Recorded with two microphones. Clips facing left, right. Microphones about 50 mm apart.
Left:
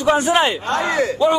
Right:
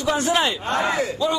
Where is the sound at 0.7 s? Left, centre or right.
Left.